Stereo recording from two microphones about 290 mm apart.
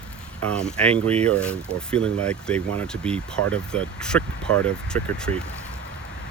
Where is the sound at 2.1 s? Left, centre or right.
Right.